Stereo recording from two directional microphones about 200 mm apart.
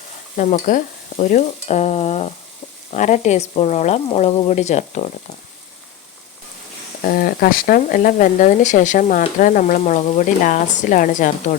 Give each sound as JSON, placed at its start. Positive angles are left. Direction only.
{"t": 0.5, "sound": "speech", "side_deg": 40}
{"t": 7.0, "sound": "speech", "side_deg": 50}